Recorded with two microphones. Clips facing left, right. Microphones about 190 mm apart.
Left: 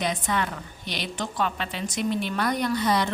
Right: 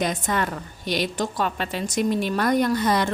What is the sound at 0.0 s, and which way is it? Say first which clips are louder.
A woman's voice: right 2 dB; 45° right (ahead or behind).